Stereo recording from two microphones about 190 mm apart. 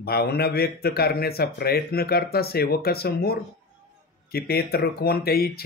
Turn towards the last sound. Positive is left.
turn(degrees=55)  # may be behind; listen again after turning